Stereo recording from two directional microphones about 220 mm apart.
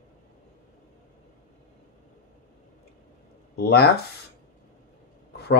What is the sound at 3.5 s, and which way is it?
Speech, 45° left (ahead or behind).